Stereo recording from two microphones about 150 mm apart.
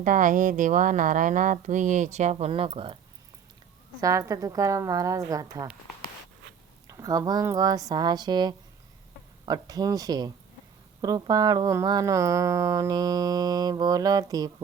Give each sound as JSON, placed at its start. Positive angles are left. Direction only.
{"t": 0.0, "sound": "speech", "side_deg": -60}
{"t": 4.0, "sound": "speech", "side_deg": -20}
{"t": 6.8, "sound": "speech", "side_deg": -20}